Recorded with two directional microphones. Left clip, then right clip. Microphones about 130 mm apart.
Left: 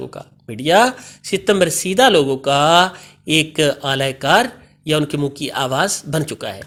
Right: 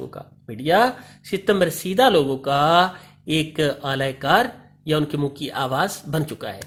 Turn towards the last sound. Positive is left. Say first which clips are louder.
# left 4 dB
turn(degrees=25)  # may be behind; listen again after turning